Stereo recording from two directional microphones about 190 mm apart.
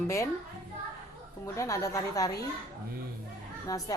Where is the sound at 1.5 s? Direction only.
15° left (ahead or behind).